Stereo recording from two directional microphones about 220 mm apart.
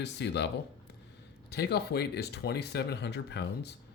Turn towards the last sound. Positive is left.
turn(degrees=50)  # may be behind; listen again after turning